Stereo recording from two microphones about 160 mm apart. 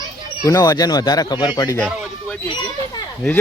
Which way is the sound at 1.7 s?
5° left (ahead or behind).